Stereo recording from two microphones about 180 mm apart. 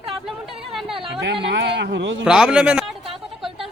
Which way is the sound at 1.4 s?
75° right (ahead or behind).